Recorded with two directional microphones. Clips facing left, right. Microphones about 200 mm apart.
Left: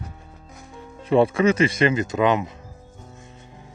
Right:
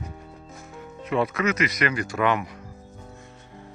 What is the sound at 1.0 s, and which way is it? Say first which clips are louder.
Speech: left 7 dB; 30° left (ahead or behind).